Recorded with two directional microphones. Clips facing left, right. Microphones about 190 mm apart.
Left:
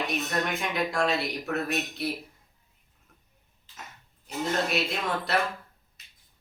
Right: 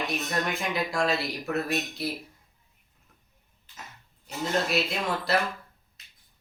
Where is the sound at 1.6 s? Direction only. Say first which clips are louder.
Even; centre (ahead or behind).